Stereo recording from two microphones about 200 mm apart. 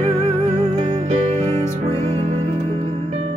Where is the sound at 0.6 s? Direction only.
35° right (ahead or behind).